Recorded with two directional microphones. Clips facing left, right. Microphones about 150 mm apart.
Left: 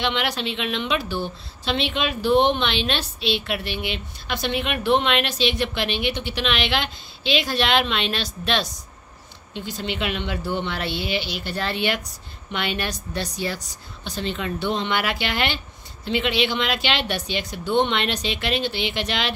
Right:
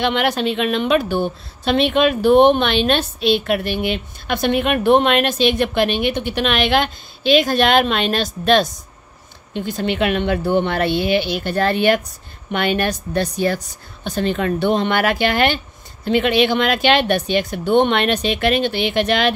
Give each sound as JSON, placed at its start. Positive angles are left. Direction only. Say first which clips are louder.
{"t": 0.0, "sound": "a woman's voice", "louder": "right 7 dB", "side_deg": -50}